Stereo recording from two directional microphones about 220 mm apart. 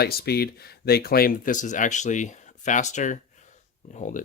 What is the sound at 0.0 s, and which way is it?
Speech, 45° left (ahead or behind).